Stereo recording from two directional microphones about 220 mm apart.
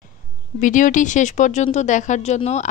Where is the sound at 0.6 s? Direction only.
35° left (ahead or behind).